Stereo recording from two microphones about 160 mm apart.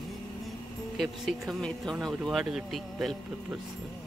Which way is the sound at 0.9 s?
Centre (ahead or behind).